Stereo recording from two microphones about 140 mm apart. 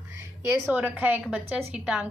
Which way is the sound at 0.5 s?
10° right (ahead or behind).